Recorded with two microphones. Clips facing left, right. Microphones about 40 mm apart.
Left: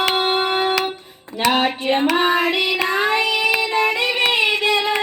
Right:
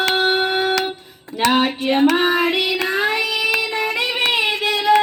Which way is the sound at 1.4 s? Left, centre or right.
Centre.